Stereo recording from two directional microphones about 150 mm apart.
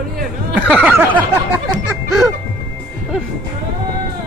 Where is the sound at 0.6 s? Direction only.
10° right (ahead or behind).